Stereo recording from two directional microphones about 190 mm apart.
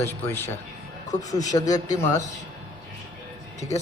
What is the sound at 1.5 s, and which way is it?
Speech, 20° left (ahead or behind).